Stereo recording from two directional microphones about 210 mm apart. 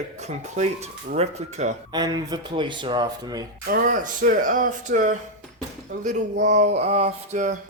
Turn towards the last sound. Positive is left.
turn(degrees=-35)  # may be behind; listen again after turning